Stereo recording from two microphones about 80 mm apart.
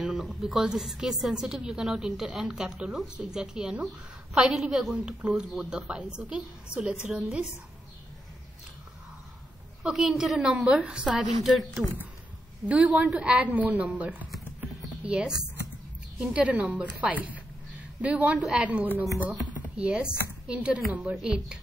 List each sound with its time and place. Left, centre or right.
0.0 s a sound: centre
0.4 s a woman's voice: centre
9.8 s a woman's voice: centre
12.6 s a woman's voice: centre